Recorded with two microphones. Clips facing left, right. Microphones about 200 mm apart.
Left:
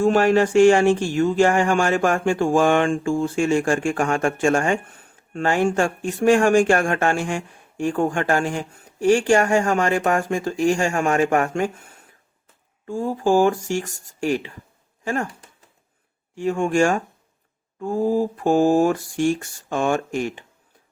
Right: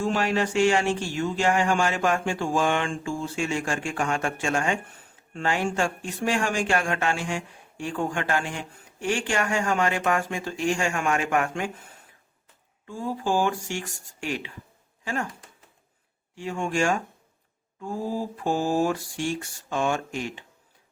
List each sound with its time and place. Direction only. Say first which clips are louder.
0.0 s speech: left 8 dB; 50° left (ahead or behind)
12.9 s speech: left 7 dB; 45° left (ahead or behind)
16.3 s speech: left 8 dB; 50° left (ahead or behind)